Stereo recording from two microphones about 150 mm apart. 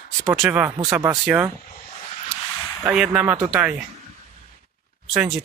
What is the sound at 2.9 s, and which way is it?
Speech, 5° right (ahead or behind).